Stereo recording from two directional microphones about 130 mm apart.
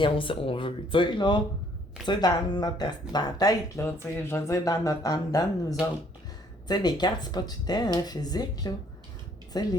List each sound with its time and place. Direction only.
0.0 s speech: 40° left (ahead or behind)